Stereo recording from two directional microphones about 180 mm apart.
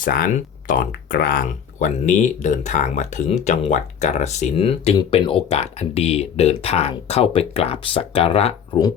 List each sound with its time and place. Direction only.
0.0 s speech: 50° left (ahead or behind); by 8.8 s 30° left (ahead or behind)